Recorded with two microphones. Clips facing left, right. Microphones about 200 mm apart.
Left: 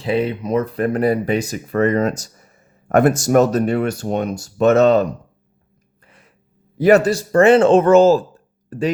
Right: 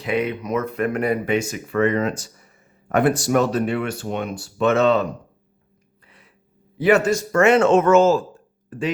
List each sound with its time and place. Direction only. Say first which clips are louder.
0.0 s speech: left 3 dB; 30° left (ahead or behind)
6.0 s a sound: left 3 dB; 45° left (ahead or behind)
6.7 s speech: left 4 dB; 40° left (ahead or behind)